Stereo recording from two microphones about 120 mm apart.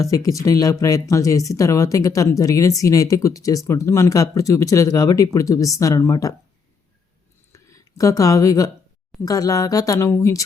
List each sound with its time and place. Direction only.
0.0 s speech: 30° left (ahead or behind)
7.5 s speech: 25° left (ahead or behind)